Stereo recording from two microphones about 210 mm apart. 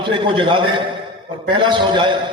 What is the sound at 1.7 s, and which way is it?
Speech, 20° right (ahead or behind).